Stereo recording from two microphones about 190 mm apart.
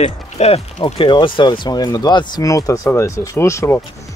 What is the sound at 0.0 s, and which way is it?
Speech, 35° left (ahead or behind).